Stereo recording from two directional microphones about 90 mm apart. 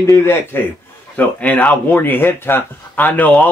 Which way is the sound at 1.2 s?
15° left (ahead or behind).